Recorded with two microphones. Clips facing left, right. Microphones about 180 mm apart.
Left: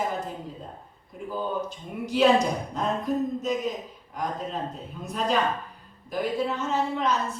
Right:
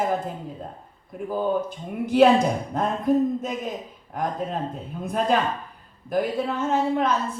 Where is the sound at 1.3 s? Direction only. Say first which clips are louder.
Right 6 dB; 55° right (ahead or behind).